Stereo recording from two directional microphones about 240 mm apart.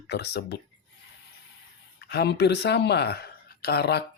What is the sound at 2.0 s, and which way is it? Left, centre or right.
Speech, left.